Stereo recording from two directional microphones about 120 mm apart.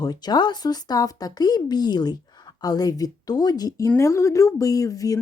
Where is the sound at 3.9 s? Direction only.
25° left (ahead or behind).